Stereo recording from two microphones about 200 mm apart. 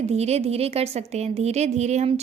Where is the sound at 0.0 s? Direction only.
35° right (ahead or behind).